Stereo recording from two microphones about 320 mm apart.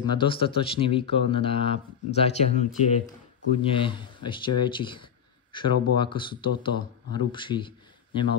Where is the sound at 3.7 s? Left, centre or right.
Centre.